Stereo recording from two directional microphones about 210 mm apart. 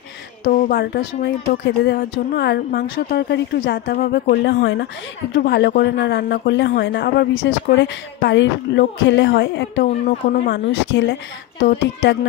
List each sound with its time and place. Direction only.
0.5 s speech: 45° left (ahead or behind)